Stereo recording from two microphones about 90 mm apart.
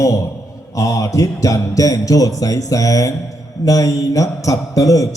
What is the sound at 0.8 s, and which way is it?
Mantra, 40° left (ahead or behind).